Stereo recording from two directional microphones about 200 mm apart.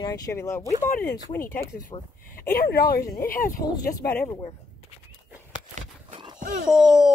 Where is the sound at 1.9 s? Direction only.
10° left (ahead or behind).